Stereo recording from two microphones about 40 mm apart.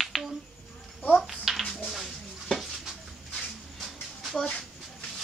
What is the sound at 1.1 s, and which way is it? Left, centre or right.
Speech, centre.